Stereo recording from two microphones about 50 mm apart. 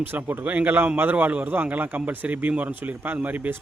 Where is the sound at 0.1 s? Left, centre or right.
Right.